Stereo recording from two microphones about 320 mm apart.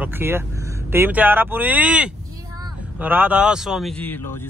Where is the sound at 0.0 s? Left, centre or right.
Centre.